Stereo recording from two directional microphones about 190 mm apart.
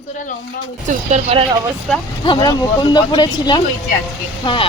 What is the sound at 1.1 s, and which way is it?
Speech, 35° right (ahead or behind).